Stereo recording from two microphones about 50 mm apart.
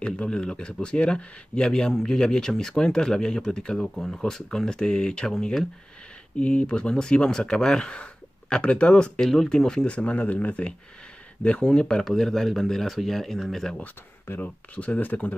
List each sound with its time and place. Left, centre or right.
0.0 s speech: centre
3.8 s speech: centre
6.4 s speech: left
9.8 s speech: left
12.0 s speech: centre
14.2 s speech: left
14.8 s speech: left